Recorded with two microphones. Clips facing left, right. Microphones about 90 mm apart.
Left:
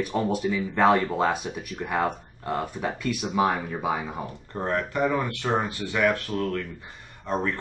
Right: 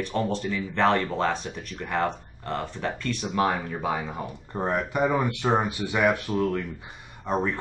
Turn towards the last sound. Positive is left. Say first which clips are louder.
# right 1 dB
turn(degrees=-15)  # may be behind; listen again after turning